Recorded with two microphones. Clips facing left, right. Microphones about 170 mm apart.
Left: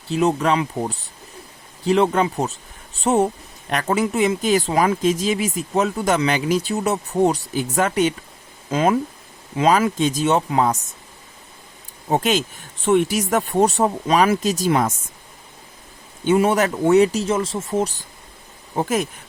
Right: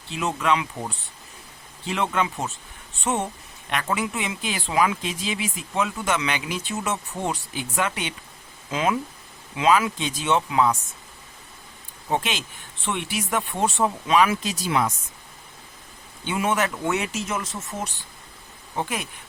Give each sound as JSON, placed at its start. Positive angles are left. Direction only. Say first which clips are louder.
{"t": 0.1, "sound": "speech", "louder": "left 6 dB", "side_deg": 40}
{"t": 12.0, "sound": "speech", "louder": "left 7 dB", "side_deg": 40}
{"t": 16.2, "sound": "speech", "louder": "left 7 dB", "side_deg": 40}